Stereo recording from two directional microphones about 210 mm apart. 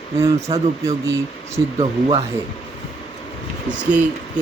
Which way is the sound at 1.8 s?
25° right (ahead or behind).